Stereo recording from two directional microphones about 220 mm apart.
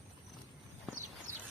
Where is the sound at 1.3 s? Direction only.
35° right (ahead or behind).